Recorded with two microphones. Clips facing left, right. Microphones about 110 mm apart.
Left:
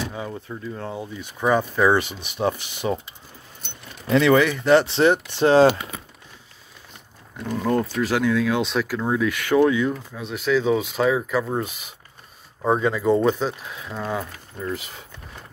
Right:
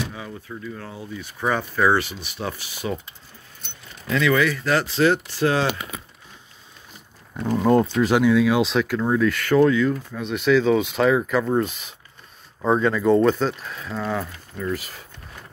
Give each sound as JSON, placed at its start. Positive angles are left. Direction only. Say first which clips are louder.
{"t": 0.1, "sound": "speech", "louder": "left 3 dB", "side_deg": 35}
{"t": 1.2, "sound": "speech", "louder": "left 4 dB", "side_deg": 15}
{"t": 4.1, "sound": "speech", "louder": "left 3 dB", "side_deg": 30}
{"t": 7.6, "sound": "speech", "louder": "right 4 dB", "side_deg": -25}
{"t": 8.2, "sound": "speech", "louder": "right 3 dB", "side_deg": -10}
{"t": 9.3, "sound": "speech", "louder": "left 1 dB", "side_deg": 15}
{"t": 10.1, "sound": "speech", "louder": "right 4 dB", "side_deg": 5}